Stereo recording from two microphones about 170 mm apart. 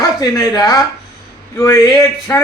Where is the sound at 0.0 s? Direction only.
20° left (ahead or behind).